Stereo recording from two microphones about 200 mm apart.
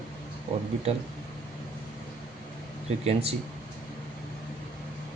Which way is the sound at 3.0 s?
30° right (ahead or behind).